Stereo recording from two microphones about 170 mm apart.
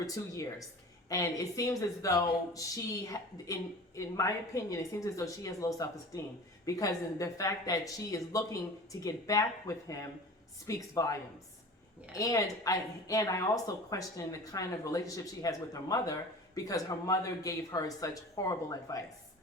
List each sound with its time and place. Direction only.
0.0 s speech: 20° left (ahead or behind)
12.1 s speech: 20° left (ahead or behind)